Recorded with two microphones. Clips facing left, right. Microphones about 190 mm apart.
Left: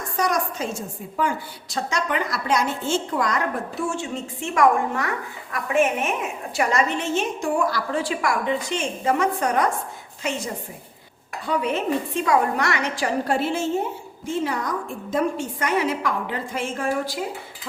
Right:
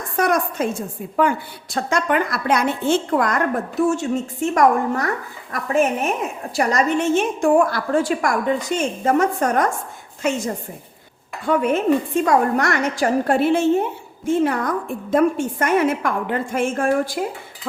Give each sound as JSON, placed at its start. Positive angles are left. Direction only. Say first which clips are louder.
{"t": 0.2, "sound": "a woman's voice", "louder": "right 5 dB", "side_deg": -55}
{"t": 11.4, "sound": "a woman's voice", "louder": "right 6 dB", "side_deg": -50}